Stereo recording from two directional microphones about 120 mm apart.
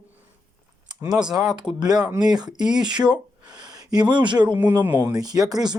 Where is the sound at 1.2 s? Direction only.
30° right (ahead or behind).